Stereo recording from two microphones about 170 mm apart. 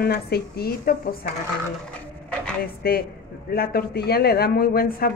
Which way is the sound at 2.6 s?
60° left (ahead or behind).